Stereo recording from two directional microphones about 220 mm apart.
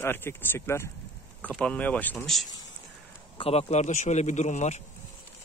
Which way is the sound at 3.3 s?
30° left (ahead or behind).